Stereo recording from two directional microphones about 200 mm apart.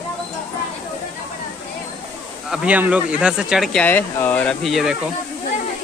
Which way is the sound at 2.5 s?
5° right (ahead or behind).